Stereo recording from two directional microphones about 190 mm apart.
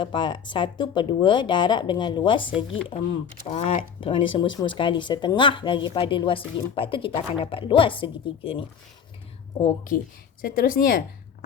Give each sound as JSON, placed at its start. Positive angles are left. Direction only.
{"t": 0.0, "sound": "speech", "side_deg": 25}
{"t": 2.9, "sound": "speech", "side_deg": 35}
{"t": 9.6, "sound": "speech", "side_deg": 45}